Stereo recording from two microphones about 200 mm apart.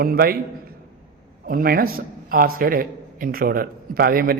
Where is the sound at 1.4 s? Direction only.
45° right (ahead or behind).